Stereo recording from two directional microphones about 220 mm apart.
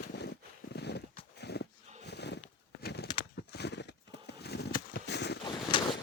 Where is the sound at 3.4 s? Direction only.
50° left (ahead or behind).